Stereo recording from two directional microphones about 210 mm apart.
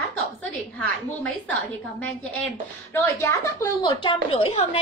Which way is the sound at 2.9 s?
10° left (ahead or behind).